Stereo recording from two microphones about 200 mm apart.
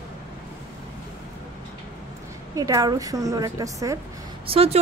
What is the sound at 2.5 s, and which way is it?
A woman's voice, 15° right (ahead or behind).